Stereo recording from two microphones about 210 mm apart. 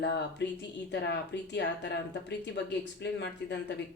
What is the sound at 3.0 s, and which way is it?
Speech, 55° left (ahead or behind).